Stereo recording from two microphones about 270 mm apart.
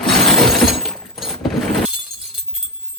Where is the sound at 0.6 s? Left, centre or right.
Centre.